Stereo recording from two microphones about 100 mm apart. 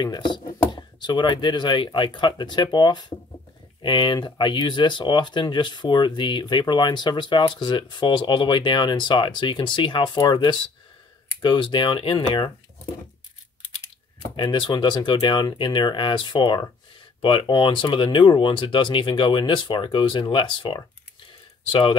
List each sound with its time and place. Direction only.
0.0 s speech: 50° left (ahead or behind)
14.3 s speech: 50° left (ahead or behind)